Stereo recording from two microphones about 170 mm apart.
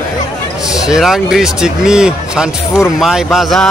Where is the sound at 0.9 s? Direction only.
Centre (ahead or behind).